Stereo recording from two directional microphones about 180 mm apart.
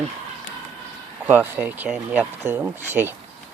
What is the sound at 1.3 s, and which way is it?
Speech, 10° right (ahead or behind).